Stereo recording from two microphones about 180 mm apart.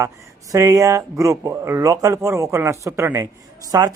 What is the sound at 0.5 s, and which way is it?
A man's voice, 20° right (ahead or behind).